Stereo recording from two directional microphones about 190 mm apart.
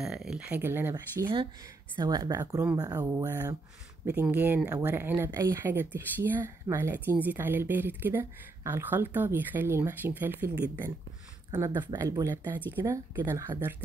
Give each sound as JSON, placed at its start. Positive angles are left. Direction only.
{"t": 0.0, "sound": "speech", "side_deg": 0}